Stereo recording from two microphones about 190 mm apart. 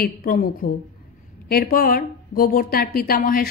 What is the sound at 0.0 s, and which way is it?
A woman's voice, 50° left (ahead or behind).